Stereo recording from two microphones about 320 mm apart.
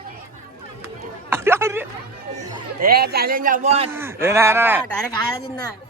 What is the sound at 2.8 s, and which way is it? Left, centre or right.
A man's voice, right.